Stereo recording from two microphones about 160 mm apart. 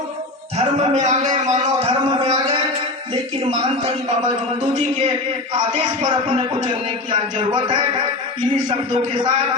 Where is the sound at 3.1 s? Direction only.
40° right (ahead or behind).